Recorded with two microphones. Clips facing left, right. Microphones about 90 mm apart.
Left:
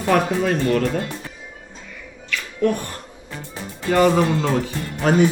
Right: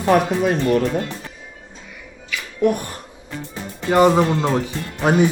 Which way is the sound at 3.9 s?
20° right (ahead or behind).